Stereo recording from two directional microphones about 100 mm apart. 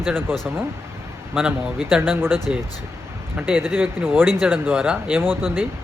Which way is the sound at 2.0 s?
20° right (ahead or behind).